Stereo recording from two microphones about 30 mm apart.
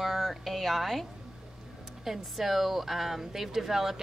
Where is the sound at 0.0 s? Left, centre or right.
Centre.